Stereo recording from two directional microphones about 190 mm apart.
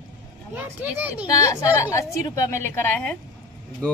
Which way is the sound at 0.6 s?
10° right (ahead or behind).